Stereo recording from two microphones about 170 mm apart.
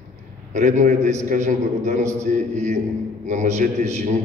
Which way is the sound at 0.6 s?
45° right (ahead or behind).